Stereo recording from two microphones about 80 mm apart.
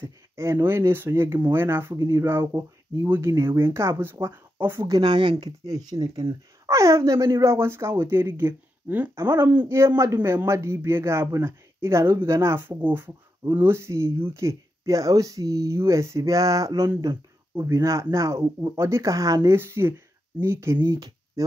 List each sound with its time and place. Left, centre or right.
0.0 s speech: right
2.0 s speech: right
5.0 s speech: right
5.7 s speech: right
9.1 s speech: right
19.5 s speech: right